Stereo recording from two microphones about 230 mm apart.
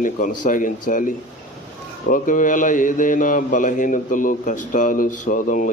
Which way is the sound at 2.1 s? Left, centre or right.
Left.